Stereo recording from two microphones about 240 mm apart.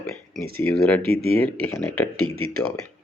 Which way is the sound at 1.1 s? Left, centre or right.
Right.